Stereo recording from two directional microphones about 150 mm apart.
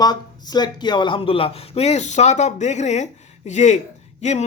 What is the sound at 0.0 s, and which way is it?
Speech, 25° left (ahead or behind).